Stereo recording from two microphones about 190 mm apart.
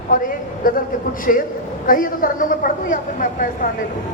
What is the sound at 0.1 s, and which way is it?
A woman's voice, 50° left (ahead or behind).